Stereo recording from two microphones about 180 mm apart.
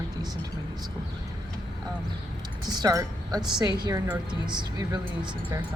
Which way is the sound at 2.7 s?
20° right (ahead or behind).